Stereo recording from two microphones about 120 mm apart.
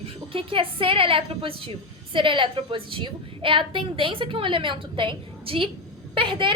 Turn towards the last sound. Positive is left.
turn(degrees=-45)  # may be behind; listen again after turning